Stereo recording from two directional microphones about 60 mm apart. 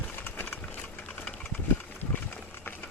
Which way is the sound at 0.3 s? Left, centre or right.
Left.